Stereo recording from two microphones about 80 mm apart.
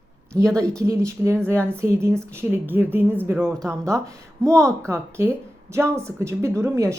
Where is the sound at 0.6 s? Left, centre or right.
Right.